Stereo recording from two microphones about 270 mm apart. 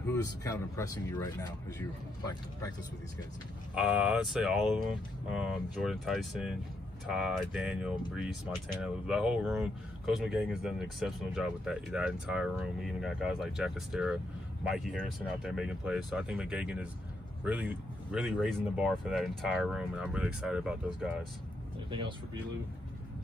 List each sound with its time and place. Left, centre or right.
0.0 s speech: centre
3.7 s speech: centre
21.9 s speech: centre